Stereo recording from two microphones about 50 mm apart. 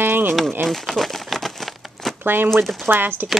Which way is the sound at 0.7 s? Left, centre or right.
Centre.